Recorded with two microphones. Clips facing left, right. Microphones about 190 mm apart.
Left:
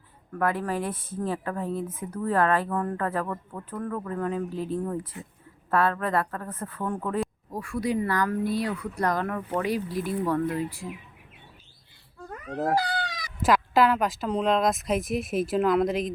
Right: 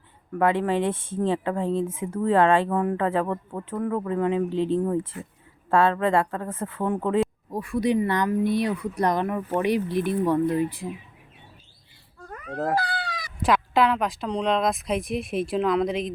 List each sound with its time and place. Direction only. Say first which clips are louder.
0.3 s speech: right 5 dB; 25° right (ahead or behind)
12.5 s dog: even; 15° left (ahead or behind)
13.4 s speech: even; centre (ahead or behind)